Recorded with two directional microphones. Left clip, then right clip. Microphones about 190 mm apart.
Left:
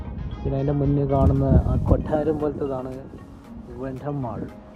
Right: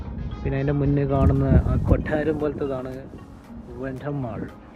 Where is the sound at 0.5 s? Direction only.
Centre (ahead or behind).